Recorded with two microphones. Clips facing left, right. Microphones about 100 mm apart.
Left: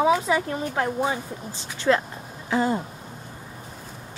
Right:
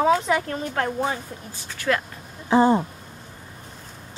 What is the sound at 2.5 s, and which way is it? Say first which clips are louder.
Speech: right 6 dB; 25° right (ahead or behind).